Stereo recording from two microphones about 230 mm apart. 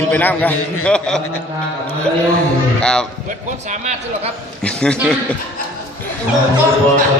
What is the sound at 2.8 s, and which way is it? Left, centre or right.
Speech, centre.